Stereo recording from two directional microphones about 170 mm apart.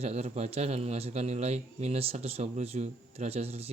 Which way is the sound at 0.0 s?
40° right (ahead or behind).